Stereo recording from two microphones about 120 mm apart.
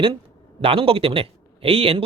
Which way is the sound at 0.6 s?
50° right (ahead or behind).